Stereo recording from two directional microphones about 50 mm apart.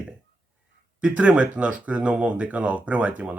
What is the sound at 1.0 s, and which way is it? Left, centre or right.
Speech, right.